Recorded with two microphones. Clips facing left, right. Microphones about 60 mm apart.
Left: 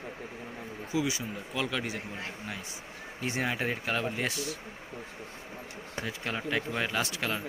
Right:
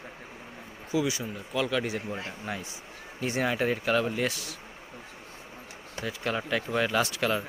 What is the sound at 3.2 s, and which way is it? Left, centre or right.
Speech, centre.